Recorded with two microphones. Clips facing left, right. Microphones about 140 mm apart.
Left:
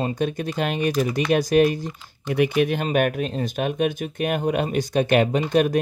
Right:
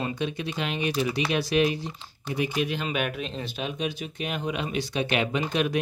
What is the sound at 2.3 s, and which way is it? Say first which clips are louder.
Speech: left 7 dB; 60° left (ahead or behind).